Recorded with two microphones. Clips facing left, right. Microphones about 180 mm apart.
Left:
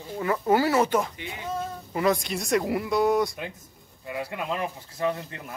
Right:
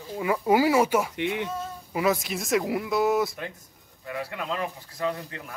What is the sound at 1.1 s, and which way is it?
Speech, 70° right (ahead or behind).